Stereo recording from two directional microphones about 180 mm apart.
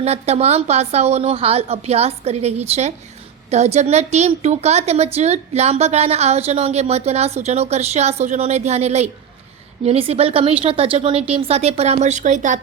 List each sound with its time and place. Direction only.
0.0 s a woman's voice: 35° right (ahead or behind)